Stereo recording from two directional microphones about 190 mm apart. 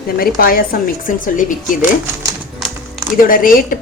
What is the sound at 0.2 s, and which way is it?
A woman's voice, 50° left (ahead or behind).